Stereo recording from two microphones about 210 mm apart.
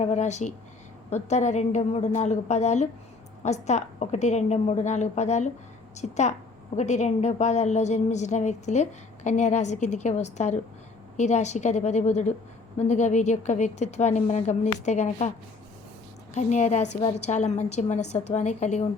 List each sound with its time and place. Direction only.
0.0 s a woman's voice: 35° left (ahead or behind)
16.3 s a woman's voice: 35° left (ahead or behind)